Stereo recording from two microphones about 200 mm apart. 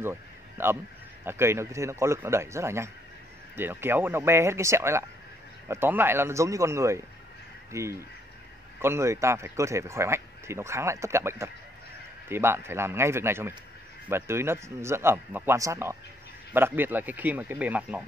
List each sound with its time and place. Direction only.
0.0 s speech: 10° right (ahead or behind)